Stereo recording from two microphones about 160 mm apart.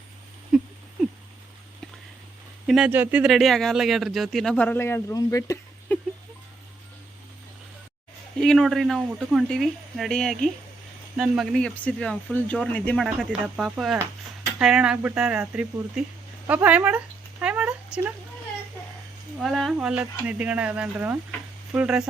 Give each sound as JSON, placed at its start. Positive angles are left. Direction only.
{"t": 0.5, "sound": "a sound", "side_deg": -5}
{"t": 2.6, "sound": "speech", "side_deg": 0}
{"t": 8.4, "sound": "speech", "side_deg": 0}
{"t": 13.1, "sound": "speech", "side_deg": 0}
{"t": 17.4, "sound": "a sound", "side_deg": -5}
{"t": 19.4, "sound": "speech", "side_deg": 0}